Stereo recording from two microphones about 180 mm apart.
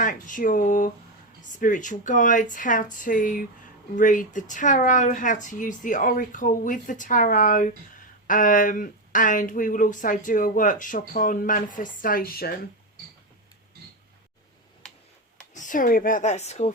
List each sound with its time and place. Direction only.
0.0 s speech: 45° left (ahead or behind)
15.5 s speech: 45° left (ahead or behind)